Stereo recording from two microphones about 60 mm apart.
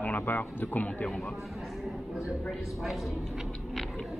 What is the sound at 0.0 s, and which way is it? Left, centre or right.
Speech, left.